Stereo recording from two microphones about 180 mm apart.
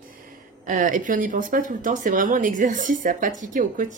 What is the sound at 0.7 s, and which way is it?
A woman's voice, 45° right (ahead or behind).